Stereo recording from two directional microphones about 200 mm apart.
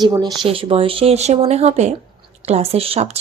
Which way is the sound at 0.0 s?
20° right (ahead or behind).